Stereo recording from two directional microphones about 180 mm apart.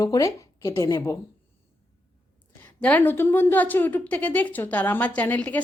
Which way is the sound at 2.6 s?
10° left (ahead or behind).